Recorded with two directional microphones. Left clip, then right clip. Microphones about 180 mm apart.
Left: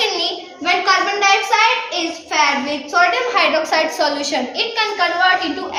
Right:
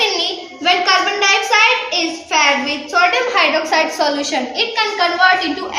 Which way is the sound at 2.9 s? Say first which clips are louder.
Right 1 dB; 15° left (ahead or behind).